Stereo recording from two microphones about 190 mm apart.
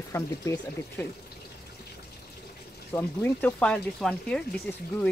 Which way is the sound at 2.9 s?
10° left (ahead or behind).